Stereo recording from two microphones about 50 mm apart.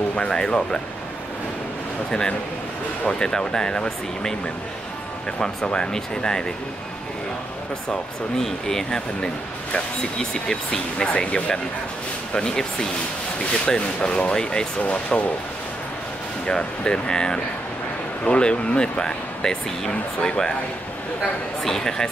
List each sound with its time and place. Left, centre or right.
0.1 s speech: centre
2.0 s speech: centre
5.4 s speech: centre
8.4 s speech: centre
14.8 s speech: left
16.4 s speech: centre
21.6 s speech: centre